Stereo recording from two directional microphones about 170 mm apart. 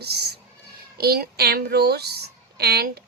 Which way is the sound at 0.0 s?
70° right (ahead or behind).